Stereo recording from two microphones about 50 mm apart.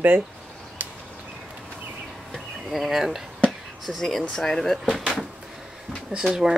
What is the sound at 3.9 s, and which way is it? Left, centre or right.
Speech, centre.